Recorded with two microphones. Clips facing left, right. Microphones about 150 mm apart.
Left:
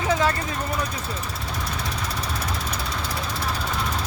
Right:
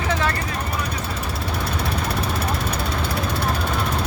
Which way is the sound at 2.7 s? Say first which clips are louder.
Right 5 dB; 55° right (ahead or behind).